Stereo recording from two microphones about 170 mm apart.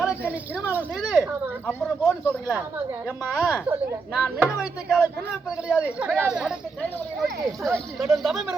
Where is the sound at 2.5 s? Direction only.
10° right (ahead or behind).